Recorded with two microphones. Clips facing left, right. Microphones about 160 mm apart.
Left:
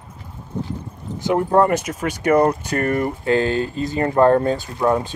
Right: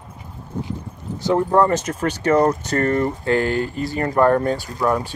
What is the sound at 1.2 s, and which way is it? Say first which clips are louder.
Speech: even; 20° left (ahead or behind).